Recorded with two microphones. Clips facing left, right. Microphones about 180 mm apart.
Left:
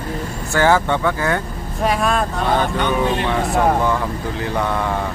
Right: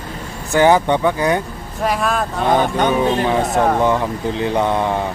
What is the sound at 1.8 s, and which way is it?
Speech, centre (ahead or behind).